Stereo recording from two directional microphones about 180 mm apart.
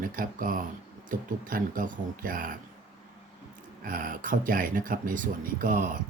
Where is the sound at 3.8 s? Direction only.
50° right (ahead or behind).